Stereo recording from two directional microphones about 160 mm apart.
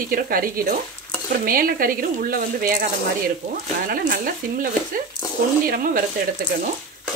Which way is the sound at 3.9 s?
60° right (ahead or behind).